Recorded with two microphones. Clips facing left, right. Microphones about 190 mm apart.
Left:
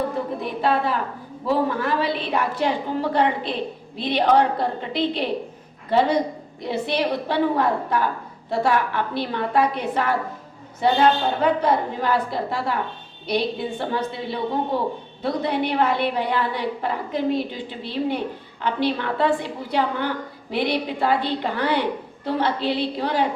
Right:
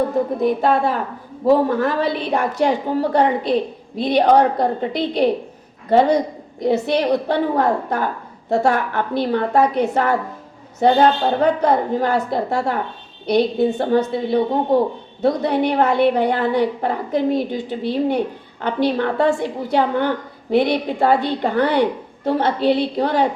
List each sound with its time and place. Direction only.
0.4 s a woman's voice: 45° right (ahead or behind)